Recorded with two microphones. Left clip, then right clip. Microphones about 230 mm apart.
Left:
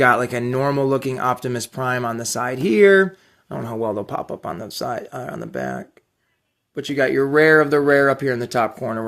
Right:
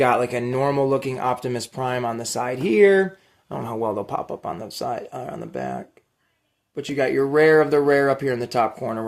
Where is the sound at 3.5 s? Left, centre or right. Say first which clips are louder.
Left 1 dB; left.